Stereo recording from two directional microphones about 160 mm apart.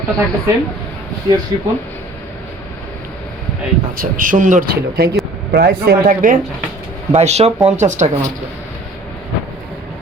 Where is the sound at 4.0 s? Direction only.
55° right (ahead or behind).